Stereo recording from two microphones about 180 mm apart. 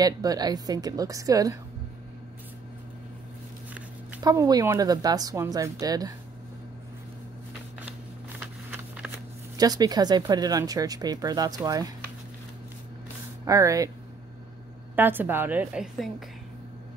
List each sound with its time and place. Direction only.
0.0 s speech: 20° right (ahead or behind)
4.2 s speech: 20° right (ahead or behind)
8.4 s a sound: 10° right (ahead or behind)
9.6 s speech: 20° right (ahead or behind)
13.5 s a woman's voice: 20° right (ahead or behind)
15.0 s a woman's voice: 10° right (ahead or behind)